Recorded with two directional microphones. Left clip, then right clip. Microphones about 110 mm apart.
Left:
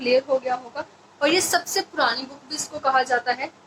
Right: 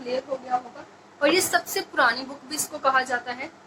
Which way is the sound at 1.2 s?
30° left (ahead or behind).